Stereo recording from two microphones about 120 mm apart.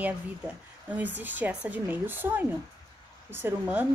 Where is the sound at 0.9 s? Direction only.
15° right (ahead or behind).